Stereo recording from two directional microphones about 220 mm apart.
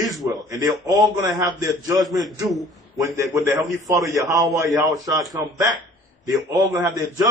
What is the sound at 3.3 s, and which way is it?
Speech, 15° right (ahead or behind).